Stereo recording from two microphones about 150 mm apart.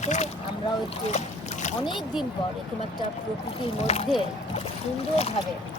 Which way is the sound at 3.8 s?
45° left (ahead or behind).